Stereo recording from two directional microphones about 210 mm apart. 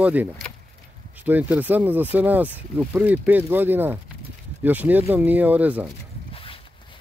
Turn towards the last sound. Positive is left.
turn(degrees=25)  # may be behind; listen again after turning